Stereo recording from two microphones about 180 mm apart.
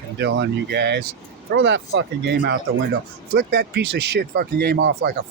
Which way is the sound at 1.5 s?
90° right.